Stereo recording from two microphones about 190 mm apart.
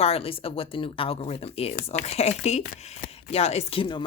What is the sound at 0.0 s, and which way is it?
Speech, 30° left (ahead or behind).